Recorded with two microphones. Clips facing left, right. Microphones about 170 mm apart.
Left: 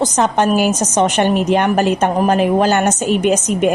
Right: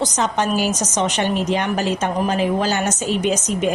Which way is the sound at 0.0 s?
55° left (ahead or behind).